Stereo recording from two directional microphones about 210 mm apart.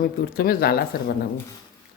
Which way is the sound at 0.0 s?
45° left (ahead or behind).